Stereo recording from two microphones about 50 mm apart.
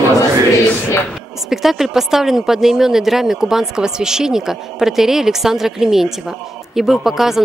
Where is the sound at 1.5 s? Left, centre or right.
Centre.